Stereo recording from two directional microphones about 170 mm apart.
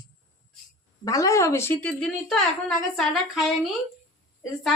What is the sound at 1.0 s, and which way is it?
A woman's voice, 20° left (ahead or behind).